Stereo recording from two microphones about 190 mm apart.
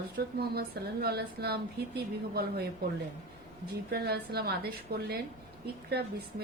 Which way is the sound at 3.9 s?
55° right (ahead or behind).